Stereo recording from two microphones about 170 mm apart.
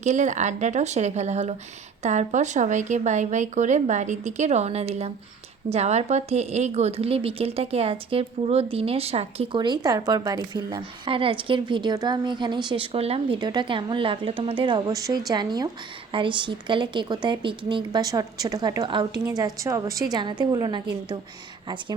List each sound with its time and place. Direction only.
0.0 s a woman's voice: 45° right (ahead or behind)
9.6 s a woman's voice: 25° right (ahead or behind)